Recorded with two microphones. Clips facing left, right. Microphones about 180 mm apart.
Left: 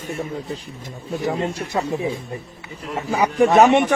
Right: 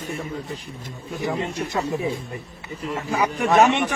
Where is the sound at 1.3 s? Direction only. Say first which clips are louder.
Even; 30° left (ahead or behind).